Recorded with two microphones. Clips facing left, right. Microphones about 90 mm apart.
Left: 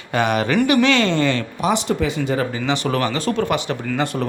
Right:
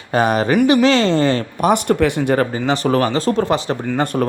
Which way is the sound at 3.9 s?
45° right (ahead or behind).